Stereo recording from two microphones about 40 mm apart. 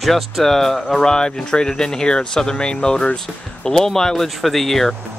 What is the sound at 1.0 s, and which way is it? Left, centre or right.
Speech, centre.